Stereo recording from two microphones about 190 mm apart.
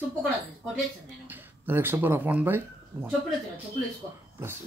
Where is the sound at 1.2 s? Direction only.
10° right (ahead or behind).